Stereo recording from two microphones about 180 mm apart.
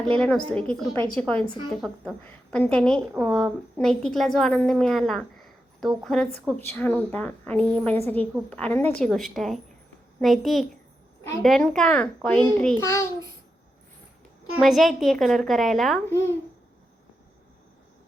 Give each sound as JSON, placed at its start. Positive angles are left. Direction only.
{"t": 0.2, "sound": "a woman's voice", "side_deg": 5}
{"t": 14.6, "sound": "a woman's voice", "side_deg": 0}
{"t": 16.0, "sound": "a woman's voice", "side_deg": 15}